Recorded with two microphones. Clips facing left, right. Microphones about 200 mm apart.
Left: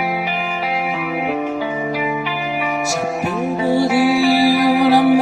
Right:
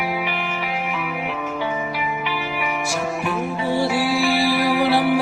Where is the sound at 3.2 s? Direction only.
40° left (ahead or behind).